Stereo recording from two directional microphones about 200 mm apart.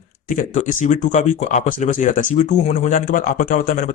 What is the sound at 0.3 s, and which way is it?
Speech, 40° left (ahead or behind).